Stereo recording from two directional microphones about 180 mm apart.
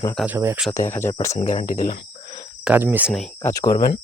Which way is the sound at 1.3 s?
40° left (ahead or behind).